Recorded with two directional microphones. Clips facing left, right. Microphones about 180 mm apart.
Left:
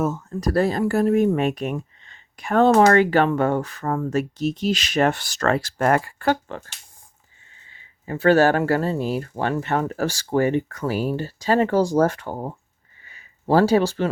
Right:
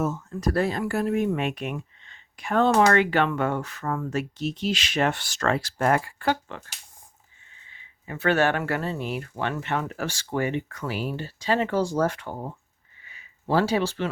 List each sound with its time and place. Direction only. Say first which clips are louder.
0.0 s speech: left 3 dB; 50° left (ahead or behind)
0.3 s speech: left 4 dB; 35° left (ahead or behind)
7.7 s speech: left 7 dB; 35° left (ahead or behind)
13.0 s a sound: left 1 dB; 40° left (ahead or behind)